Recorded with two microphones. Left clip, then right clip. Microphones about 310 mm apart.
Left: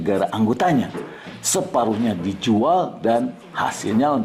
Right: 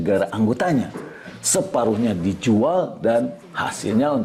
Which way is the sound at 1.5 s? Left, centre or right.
Right.